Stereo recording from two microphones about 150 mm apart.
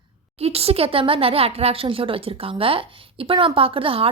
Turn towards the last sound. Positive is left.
turn(degrees=-40)  # may be behind; listen again after turning